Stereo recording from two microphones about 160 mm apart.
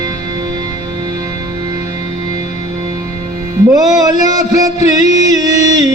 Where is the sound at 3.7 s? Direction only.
25° right (ahead or behind).